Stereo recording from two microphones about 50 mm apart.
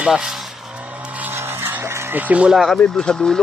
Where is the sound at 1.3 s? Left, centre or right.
Right.